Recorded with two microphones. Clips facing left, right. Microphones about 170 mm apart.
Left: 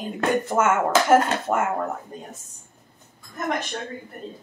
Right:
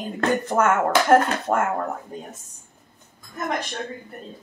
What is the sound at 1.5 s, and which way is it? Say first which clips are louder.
Speech: right 2 dB; 5° right (ahead or behind).